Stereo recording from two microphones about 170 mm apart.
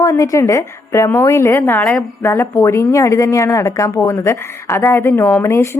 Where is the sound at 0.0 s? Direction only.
20° left (ahead or behind).